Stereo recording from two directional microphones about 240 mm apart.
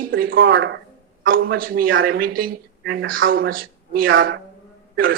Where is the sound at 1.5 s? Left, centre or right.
Right.